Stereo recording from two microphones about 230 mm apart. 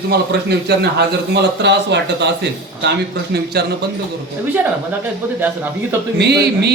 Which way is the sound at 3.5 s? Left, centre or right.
Right.